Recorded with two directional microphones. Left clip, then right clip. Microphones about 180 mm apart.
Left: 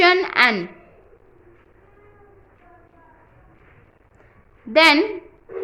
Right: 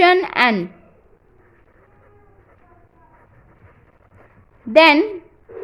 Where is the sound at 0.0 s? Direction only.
35° right (ahead or behind).